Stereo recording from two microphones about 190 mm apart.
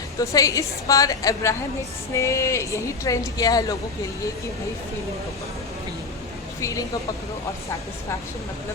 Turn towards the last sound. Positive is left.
turn(degrees=15)  # may be behind; listen again after turning